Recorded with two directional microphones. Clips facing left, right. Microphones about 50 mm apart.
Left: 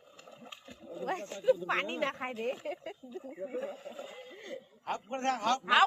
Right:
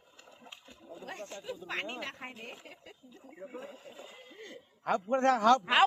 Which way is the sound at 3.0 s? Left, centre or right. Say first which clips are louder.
Left 7 dB; centre.